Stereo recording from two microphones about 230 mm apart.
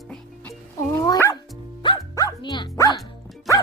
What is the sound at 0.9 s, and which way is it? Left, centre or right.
Dog, centre.